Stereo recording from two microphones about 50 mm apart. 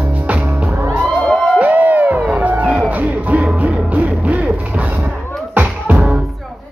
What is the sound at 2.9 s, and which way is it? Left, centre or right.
Music, right.